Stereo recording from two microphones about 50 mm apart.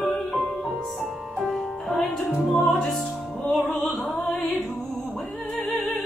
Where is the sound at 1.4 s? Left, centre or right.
Centre.